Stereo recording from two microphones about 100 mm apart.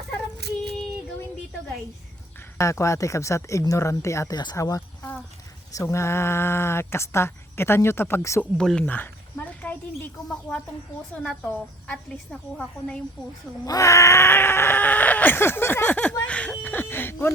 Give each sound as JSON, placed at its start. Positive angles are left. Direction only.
{"t": 2.6, "sound": "speech", "side_deg": 30}
{"t": 8.4, "sound": "a woman's voice", "side_deg": 5}
{"t": 9.6, "sound": "a sound", "side_deg": 15}
{"t": 11.2, "sound": "a woman's voice", "side_deg": 10}
{"t": 13.7, "sound": "speech", "side_deg": 35}